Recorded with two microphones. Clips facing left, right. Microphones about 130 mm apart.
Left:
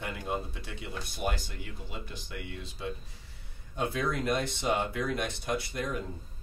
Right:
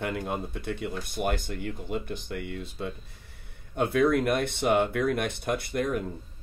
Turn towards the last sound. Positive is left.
turn(degrees=-55)  # may be behind; listen again after turning